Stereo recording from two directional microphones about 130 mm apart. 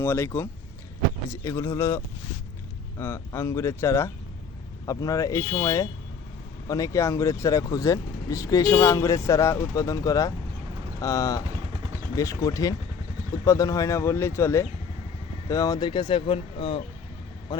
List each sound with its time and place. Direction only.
0.0 s speech: 15° left (ahead or behind)
1.3 s speech: 20° left (ahead or behind)
3.0 s speech: 20° left (ahead or behind)
11.4 s vehicle: 40° right (ahead or behind)
12.1 s speech: 25° left (ahead or behind); by 16.8 s 45° left (ahead or behind)
17.5 s speech: 30° left (ahead or behind)